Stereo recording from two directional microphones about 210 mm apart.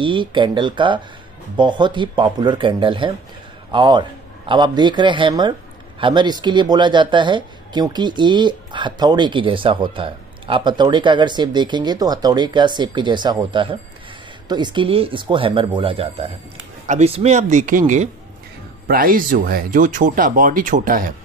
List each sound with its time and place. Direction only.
0.0 s speech: 25° right (ahead or behind); by 21.1 s 40° right (ahead or behind)